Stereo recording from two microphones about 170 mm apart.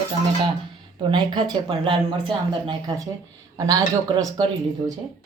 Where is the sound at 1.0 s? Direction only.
30° right (ahead or behind).